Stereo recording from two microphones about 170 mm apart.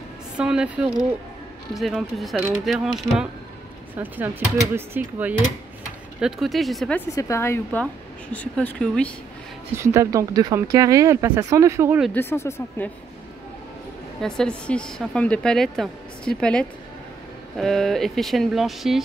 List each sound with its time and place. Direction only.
0.4 s speech: 5° right (ahead or behind)
6.2 s speech: centre (ahead or behind)
7.2 s speech: 15° left (ahead or behind)
9.8 s speech: 20° right (ahead or behind)
12.1 s speech: 15° left (ahead or behind)
14.2 s speech: 5° left (ahead or behind)